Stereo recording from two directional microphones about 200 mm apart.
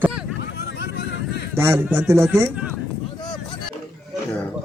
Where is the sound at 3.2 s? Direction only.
20° left (ahead or behind).